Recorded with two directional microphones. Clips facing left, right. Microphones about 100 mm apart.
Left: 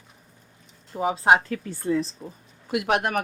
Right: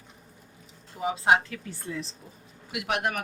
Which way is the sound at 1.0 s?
45° left (ahead or behind).